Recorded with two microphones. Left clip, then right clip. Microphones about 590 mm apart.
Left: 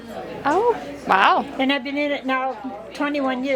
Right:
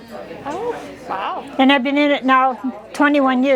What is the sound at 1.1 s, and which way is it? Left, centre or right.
Speech, left.